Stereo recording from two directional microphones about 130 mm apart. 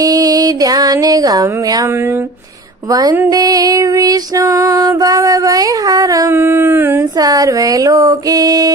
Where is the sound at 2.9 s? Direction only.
30° right (ahead or behind).